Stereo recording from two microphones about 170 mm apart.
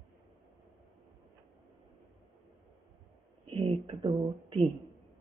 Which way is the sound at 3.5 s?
30° right (ahead or behind).